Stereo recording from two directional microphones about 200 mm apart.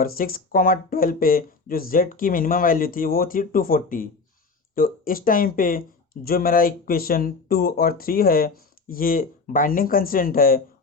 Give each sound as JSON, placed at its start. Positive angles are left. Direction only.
{"t": 0.0, "sound": "speech", "side_deg": 45}